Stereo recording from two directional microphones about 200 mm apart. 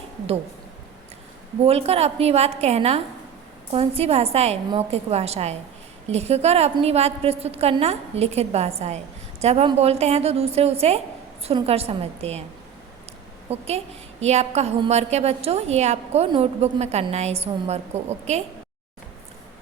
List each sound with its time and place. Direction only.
1.6 s a woman's voice: 30° right (ahead or behind)
13.5 s a woman's voice: 30° right (ahead or behind)